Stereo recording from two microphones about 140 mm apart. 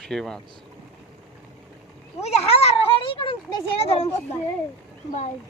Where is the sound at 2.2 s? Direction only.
50° left (ahead or behind).